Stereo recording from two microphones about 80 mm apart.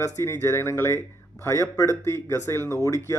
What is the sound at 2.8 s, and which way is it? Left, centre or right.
Speech, left.